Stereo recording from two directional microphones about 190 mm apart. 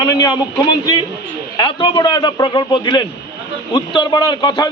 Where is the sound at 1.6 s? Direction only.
25° left (ahead or behind).